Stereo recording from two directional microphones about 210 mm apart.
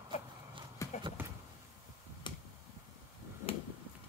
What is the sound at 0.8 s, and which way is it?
Clip-clop, 15° left (ahead or behind).